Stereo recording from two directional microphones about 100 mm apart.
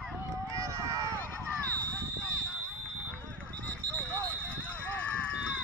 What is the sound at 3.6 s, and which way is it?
Clip-clop, 15° left (ahead or behind).